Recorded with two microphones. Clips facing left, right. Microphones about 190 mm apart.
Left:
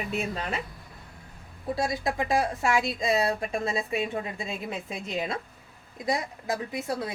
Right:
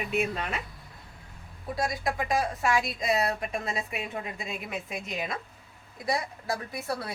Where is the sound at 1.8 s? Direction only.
25° left (ahead or behind).